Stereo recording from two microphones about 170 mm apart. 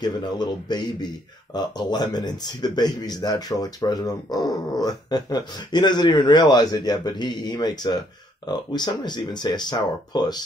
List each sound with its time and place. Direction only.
0.0 s speech: 25° left (ahead or behind)